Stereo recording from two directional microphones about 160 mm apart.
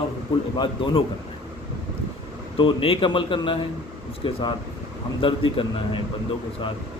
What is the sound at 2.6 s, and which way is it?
A man's voice, 35° left (ahead or behind).